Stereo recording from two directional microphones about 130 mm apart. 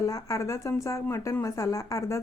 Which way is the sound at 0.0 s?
25° left (ahead or behind).